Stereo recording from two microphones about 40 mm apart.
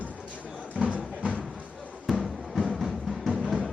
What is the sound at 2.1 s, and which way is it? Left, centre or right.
Music, centre.